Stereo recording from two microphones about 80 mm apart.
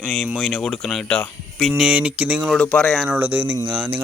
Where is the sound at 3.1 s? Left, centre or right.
Right.